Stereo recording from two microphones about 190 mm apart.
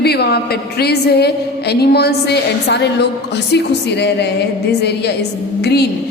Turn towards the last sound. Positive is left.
turn(degrees=60)  # may be behind; listen again after turning